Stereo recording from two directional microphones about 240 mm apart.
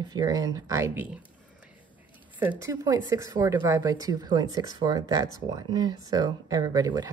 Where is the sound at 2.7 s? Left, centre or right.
Centre.